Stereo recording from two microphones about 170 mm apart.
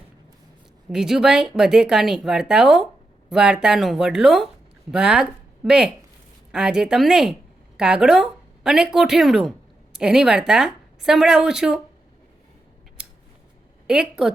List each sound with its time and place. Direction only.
0.9 s a woman's voice: 5° right (ahead or behind)
13.0 s scissors: 5° right (ahead or behind)
13.8 s speech: 5° right (ahead or behind)